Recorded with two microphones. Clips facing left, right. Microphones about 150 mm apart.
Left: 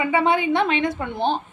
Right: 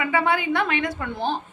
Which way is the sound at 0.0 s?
25° left (ahead or behind).